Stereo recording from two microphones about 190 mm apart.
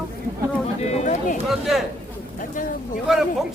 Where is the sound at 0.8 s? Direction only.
40° left (ahead or behind).